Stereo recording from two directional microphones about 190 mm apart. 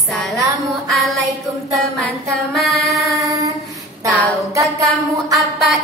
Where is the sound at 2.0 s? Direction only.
Centre (ahead or behind).